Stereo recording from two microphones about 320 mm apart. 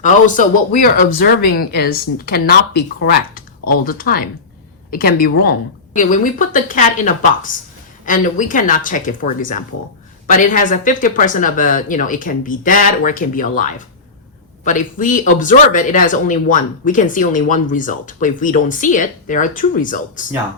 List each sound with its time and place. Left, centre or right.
0.0 s speech: left